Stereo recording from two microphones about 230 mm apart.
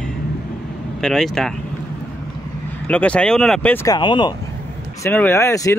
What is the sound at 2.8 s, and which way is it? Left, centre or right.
Speech, centre.